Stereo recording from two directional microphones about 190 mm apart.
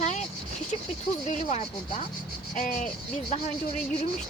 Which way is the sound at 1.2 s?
40° left (ahead or behind).